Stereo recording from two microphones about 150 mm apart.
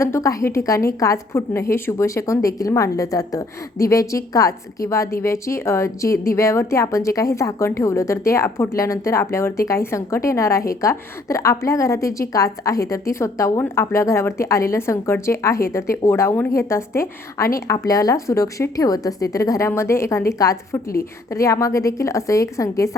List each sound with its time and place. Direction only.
0.0 s a woman's voice: 20° left (ahead or behind)